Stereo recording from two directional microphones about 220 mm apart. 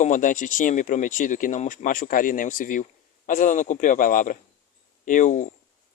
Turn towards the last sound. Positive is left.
turn(degrees=35)  # may be behind; listen again after turning